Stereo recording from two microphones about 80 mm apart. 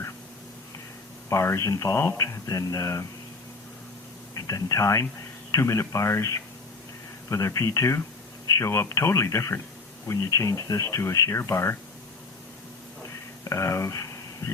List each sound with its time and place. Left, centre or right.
1.3 s speech: left
4.4 s speech: left
13.4 s speech: left